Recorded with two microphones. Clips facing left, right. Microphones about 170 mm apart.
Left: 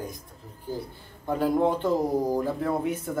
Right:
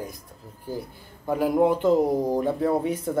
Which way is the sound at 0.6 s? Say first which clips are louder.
Right 1 dB; 10° right (ahead or behind).